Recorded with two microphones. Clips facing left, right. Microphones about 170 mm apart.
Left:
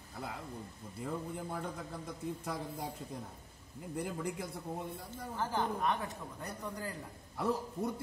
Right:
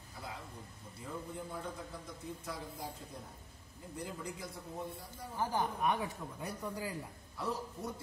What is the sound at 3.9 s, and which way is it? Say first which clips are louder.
Speech: left 5 dB; 60° left (ahead or behind).